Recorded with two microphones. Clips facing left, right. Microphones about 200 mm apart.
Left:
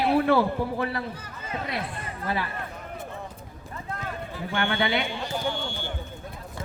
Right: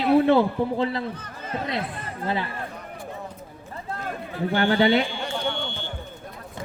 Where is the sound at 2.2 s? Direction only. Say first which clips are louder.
Right 2 dB; 25° right (ahead or behind).